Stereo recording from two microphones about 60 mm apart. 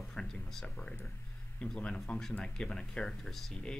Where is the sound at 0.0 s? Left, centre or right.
Centre.